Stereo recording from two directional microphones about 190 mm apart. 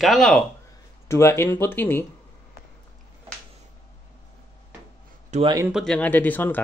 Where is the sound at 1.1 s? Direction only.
15° left (ahead or behind).